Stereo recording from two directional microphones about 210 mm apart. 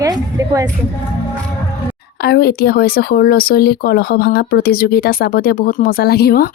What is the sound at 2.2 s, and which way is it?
Speech, 50° left (ahead or behind).